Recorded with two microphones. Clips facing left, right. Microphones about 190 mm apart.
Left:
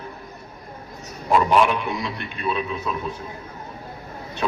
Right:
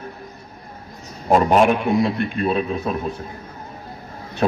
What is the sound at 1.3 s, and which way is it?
A man's voice, 45° right (ahead or behind).